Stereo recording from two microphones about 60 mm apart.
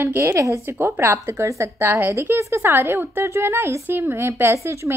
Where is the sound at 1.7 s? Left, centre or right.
Right.